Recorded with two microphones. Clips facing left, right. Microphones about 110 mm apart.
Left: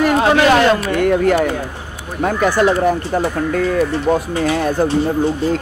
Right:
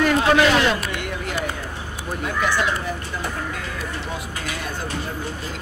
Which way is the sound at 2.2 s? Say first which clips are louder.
Left 9 dB; 45° left (ahead or behind).